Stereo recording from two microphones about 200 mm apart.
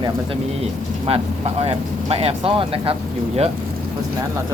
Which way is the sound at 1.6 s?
30° right (ahead or behind).